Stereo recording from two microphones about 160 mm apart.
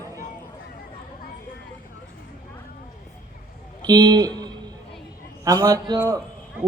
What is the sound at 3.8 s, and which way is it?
Speech, 25° right (ahead or behind).